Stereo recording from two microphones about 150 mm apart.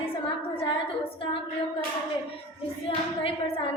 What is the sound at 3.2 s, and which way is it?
Speech, 40° left (ahead or behind).